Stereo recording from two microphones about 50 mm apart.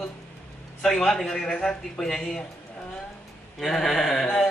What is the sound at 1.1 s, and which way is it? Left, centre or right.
A woman's voice, centre.